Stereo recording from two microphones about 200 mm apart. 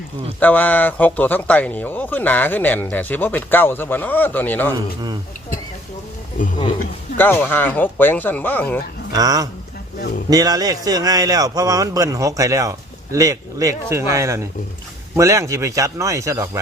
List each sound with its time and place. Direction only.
0.3 s speech: 10° left (ahead or behind)
7.2 s speech: 10° left (ahead or behind)
9.1 s speech: 20° right (ahead or behind)